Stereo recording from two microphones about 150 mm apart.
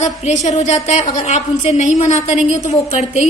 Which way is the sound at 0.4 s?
50° left (ahead or behind).